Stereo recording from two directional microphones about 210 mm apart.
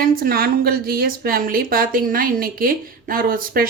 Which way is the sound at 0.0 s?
45° right (ahead or behind).